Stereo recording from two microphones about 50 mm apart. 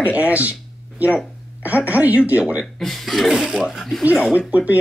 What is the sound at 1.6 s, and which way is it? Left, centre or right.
A woman's voice, right.